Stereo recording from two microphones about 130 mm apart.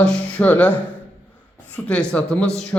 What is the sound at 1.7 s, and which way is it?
Speech, 10° left (ahead or behind).